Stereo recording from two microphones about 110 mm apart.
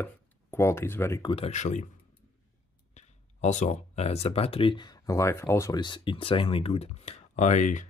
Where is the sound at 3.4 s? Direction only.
90° left; by 4.9 s 45° left (ahead or behind).